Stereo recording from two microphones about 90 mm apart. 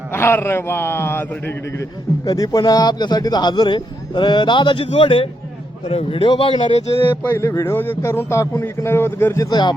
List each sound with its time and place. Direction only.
0.1 s a man's voice: 25° left (ahead or behind)
1.8 s speech: 40° left (ahead or behind); by 7.0 s 65° left (ahead or behind)
7.0 s a man's voice: 25° left (ahead or behind)
9.5 s speech: 55° left (ahead or behind)